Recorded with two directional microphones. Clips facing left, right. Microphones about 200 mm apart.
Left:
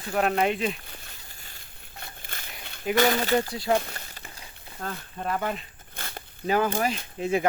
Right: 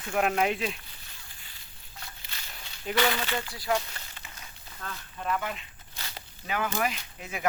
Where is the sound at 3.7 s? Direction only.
55° left (ahead or behind).